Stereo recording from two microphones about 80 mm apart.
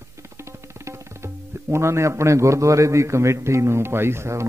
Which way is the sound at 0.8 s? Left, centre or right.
Right.